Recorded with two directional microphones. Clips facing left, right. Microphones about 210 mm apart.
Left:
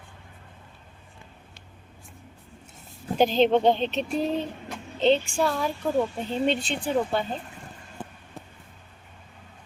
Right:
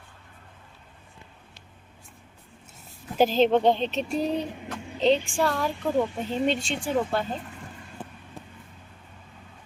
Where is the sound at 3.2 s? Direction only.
5° right (ahead or behind).